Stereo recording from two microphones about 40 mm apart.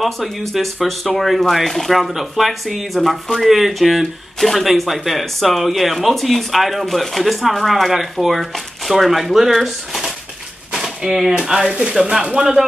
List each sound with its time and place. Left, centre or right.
0.0 s speech: centre
10.7 s speech: centre